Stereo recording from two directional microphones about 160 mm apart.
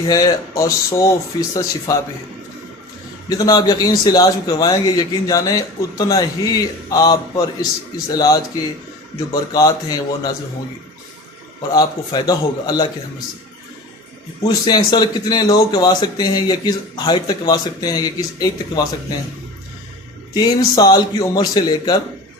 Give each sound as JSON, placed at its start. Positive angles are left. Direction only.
{"t": 0.1, "sound": "speech", "side_deg": 25}
{"t": 3.2, "sound": "speech", "side_deg": 25}
{"t": 11.7, "sound": "speech", "side_deg": 25}
{"t": 14.4, "sound": "speech", "side_deg": 25}
{"t": 20.3, "sound": "speech", "side_deg": 25}